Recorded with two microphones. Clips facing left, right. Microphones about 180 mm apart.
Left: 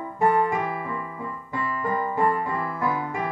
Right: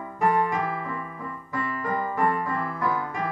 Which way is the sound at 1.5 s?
25° left (ahead or behind).